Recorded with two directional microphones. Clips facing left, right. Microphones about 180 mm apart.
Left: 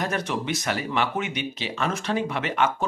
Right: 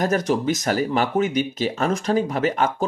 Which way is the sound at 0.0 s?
40° right (ahead or behind).